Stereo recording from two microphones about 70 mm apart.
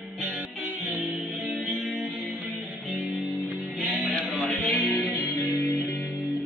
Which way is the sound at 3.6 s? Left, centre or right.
Right.